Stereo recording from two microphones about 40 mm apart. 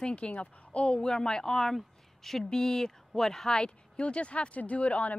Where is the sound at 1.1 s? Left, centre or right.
Centre.